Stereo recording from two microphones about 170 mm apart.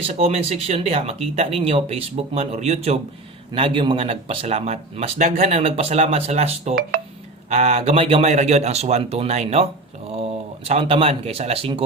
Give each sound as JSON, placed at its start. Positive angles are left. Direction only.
{"t": 0.1, "sound": "speech", "side_deg": -35}